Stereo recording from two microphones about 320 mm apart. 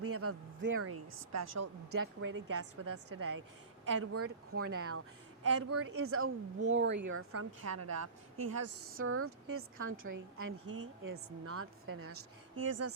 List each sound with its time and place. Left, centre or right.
0.0 s a woman's voice: right
8.4 s a woman's voice: right